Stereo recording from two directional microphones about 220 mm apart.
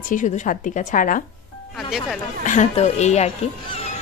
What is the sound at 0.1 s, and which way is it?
A woman's voice, 35° left (ahead or behind).